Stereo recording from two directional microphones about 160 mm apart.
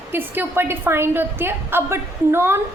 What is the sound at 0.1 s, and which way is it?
A woman's voice, 15° right (ahead or behind).